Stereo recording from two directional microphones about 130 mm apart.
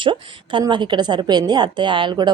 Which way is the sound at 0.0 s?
40° right (ahead or behind).